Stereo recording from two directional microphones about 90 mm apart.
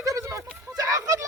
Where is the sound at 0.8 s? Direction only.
40° right (ahead or behind).